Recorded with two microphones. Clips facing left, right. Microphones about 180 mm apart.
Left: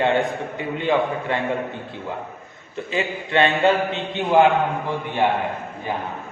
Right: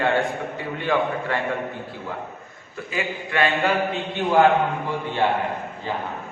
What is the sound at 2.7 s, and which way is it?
Speech, 25° left (ahead or behind).